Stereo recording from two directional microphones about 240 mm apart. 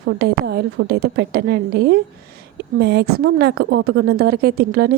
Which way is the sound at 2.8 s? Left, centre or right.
Right.